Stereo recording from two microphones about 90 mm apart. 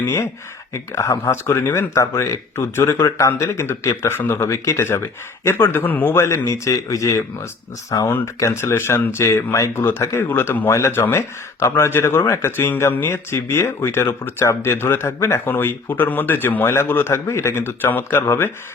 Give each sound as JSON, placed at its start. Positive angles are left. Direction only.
{"t": 0.7, "sound": "speech", "side_deg": 35}